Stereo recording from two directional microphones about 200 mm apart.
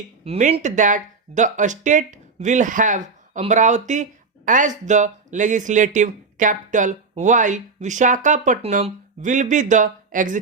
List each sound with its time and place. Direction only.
0.3 s speech: 35° right (ahead or behind)